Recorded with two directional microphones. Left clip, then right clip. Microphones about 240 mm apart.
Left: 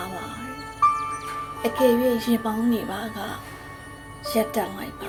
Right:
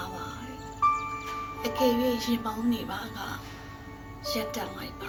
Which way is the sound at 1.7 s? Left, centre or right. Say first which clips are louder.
Left 6 dB; left.